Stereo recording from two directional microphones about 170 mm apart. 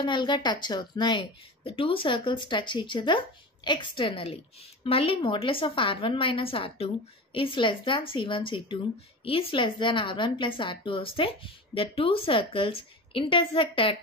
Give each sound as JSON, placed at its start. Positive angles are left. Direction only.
{"t": 0.0, "sound": "a woman's voice", "side_deg": 25}